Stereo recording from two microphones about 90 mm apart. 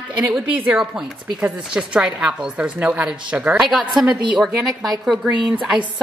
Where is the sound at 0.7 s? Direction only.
5° right (ahead or behind).